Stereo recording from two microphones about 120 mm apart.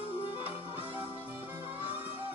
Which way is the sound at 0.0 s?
50° left (ahead or behind).